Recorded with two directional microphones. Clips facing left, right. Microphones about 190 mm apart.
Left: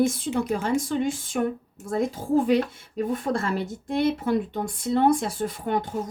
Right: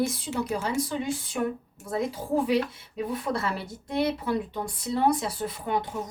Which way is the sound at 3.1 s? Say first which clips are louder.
Left 3 dB; 50° left (ahead or behind).